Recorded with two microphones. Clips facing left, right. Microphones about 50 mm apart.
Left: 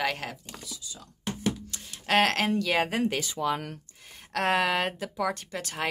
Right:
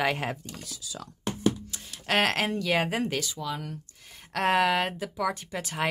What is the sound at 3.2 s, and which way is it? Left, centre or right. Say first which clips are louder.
Speech: left 5 dB; left.